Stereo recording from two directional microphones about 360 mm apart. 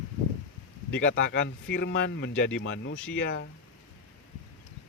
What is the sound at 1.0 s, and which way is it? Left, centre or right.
Speech, left.